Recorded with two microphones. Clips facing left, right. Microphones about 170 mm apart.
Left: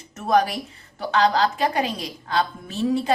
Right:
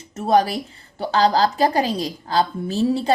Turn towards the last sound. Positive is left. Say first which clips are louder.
# right 3 dB
turn(degrees=-30)  # may be behind; listen again after turning